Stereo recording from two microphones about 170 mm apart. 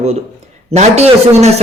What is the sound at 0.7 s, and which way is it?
Speech, 40° right (ahead or behind).